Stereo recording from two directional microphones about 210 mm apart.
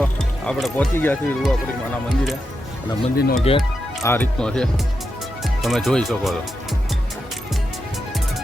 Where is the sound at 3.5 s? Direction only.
30° left (ahead or behind).